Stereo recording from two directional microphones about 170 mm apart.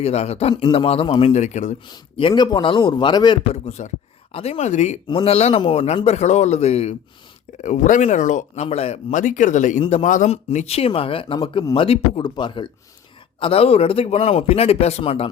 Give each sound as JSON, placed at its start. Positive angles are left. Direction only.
{"t": 0.0, "sound": "a man's voice", "side_deg": 40}
{"t": 0.5, "sound": "a man's voice", "side_deg": 25}
{"t": 1.9, "sound": "a man's voice", "side_deg": 30}
{"t": 3.5, "sound": "a man's voice", "side_deg": 40}
{"t": 5.0, "sound": "a man's voice", "side_deg": 30}